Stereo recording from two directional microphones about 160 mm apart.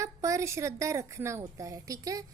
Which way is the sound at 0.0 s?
20° right (ahead or behind).